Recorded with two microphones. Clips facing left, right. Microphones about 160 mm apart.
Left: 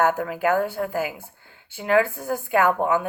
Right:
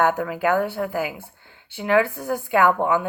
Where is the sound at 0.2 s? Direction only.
45° left (ahead or behind).